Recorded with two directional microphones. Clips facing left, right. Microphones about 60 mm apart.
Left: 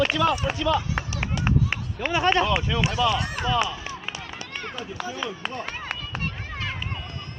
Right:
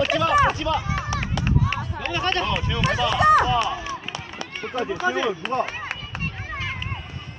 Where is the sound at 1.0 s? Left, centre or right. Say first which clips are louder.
Right 1 dB; left.